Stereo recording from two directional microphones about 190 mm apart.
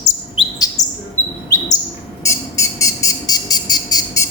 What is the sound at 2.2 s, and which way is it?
Bird, 15° left (ahead or behind).